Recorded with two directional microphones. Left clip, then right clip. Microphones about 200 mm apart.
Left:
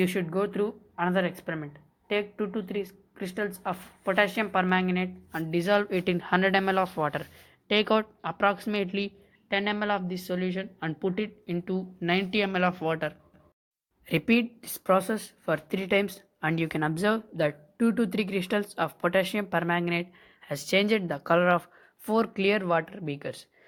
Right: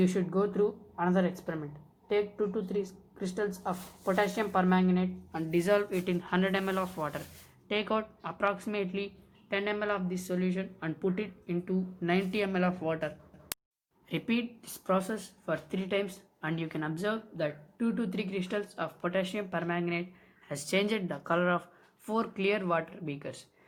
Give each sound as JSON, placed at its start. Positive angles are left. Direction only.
{"t": 0.1, "sound": "speech", "side_deg": 30}